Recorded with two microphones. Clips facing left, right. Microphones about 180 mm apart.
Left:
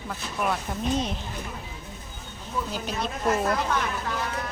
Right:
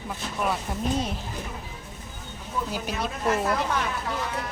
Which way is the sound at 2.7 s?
10° right (ahead or behind).